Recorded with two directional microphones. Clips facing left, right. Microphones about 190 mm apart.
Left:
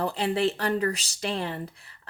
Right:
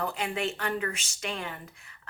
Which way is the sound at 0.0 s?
30° left (ahead or behind).